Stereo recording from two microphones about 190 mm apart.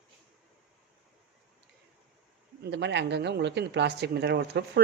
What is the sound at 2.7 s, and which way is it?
Speech, 70° right (ahead or behind).